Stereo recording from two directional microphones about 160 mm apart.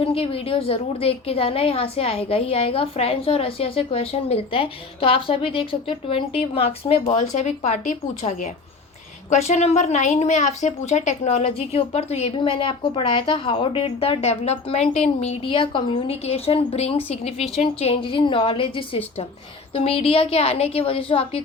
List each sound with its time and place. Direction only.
0.0 s a woman's voice: 35° left (ahead or behind)